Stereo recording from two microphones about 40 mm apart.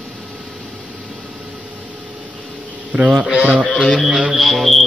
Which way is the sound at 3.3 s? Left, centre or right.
Right.